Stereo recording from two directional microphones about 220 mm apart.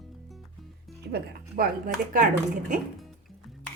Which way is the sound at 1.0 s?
45° right (ahead or behind).